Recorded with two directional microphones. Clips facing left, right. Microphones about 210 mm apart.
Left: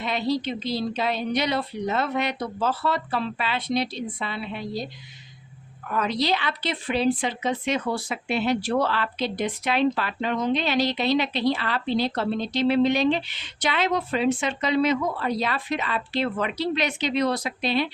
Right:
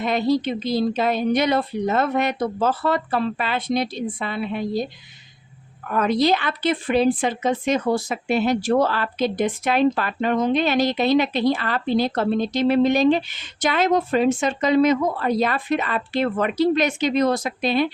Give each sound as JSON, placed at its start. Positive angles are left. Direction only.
{"t": 0.0, "sound": "a woman's voice", "side_deg": -50}
{"t": 5.9, "sound": "a woman's voice", "side_deg": -50}